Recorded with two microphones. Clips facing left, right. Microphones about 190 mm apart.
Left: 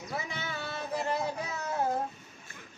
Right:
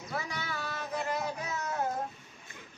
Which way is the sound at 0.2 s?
25° left (ahead or behind).